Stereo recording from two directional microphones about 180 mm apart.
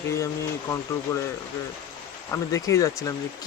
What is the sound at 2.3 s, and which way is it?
Speech, 15° left (ahead or behind).